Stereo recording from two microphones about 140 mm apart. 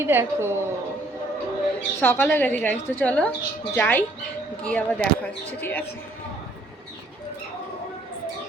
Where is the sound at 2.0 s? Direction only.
15° left (ahead or behind).